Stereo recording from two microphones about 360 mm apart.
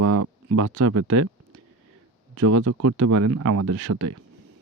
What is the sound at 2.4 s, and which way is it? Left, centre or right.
Speech, right.